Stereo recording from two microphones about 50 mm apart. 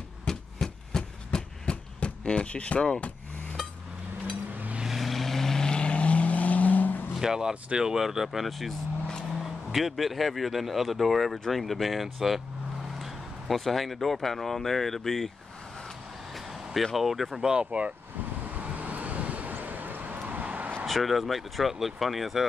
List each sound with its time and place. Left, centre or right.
0.3 s a sound: centre
4.8 s vehicle: centre; by 7.0 s left
7.2 s speech: centre
16.9 s speech: centre
17.4 s speech: centre
18.6 s vehicle: right
20.8 s speech: centre